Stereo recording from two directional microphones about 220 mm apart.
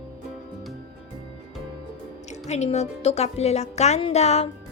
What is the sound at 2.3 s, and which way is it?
A woman's voice, 30° left (ahead or behind).